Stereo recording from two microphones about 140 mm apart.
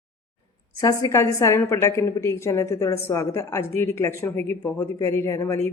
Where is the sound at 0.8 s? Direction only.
25° left (ahead or behind).